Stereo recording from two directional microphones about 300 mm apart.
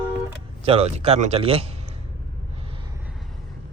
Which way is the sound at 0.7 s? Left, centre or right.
Right.